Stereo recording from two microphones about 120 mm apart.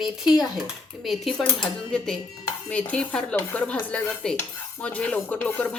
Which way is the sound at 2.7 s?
10° left (ahead or behind).